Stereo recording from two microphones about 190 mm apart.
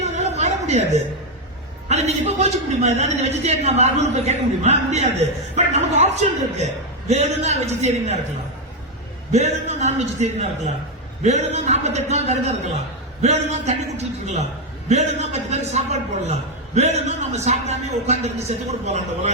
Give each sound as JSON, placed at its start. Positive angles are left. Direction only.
{"t": 0.0, "sound": "a sound", "side_deg": -35}
{"t": 1.9, "sound": "a man's voice", "side_deg": -35}
{"t": 9.3, "sound": "a man's voice", "side_deg": -35}